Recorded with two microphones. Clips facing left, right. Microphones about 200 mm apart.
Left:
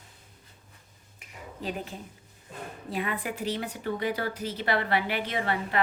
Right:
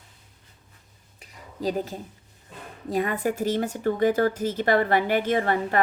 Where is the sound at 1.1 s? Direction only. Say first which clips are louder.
Right 5 dB; 35° right (ahead or behind).